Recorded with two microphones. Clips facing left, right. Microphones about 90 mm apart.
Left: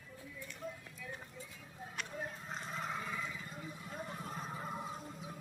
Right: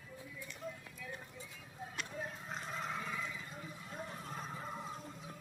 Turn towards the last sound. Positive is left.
turn(degrees=10)  # may be behind; listen again after turning